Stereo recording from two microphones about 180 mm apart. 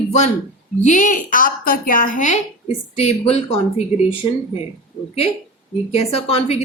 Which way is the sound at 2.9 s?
35° left (ahead or behind).